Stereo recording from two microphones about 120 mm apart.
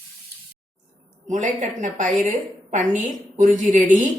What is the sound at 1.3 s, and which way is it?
A woman's voice, 90° right.